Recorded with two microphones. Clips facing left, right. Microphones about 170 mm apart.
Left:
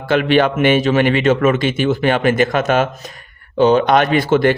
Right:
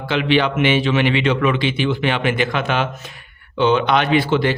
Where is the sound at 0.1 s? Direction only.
50° left (ahead or behind).